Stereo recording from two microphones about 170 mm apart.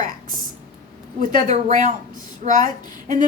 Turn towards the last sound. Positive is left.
turn(degrees=-50)  # may be behind; listen again after turning